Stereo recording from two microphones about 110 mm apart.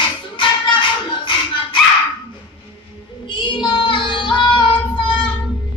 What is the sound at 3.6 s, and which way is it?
Child singing, 45° left (ahead or behind).